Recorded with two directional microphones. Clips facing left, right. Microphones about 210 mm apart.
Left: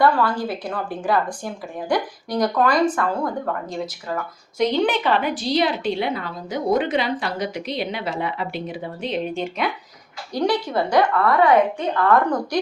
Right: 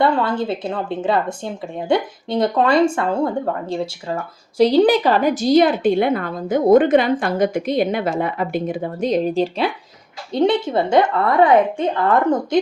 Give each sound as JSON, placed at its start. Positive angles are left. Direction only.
{"t": 0.0, "sound": "a woman's voice", "side_deg": -25}